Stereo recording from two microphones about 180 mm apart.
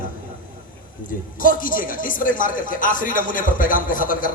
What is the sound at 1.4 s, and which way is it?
Speech, 50° left (ahead or behind).